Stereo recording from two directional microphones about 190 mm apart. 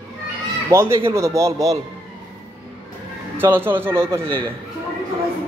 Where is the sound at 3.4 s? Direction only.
10° right (ahead or behind).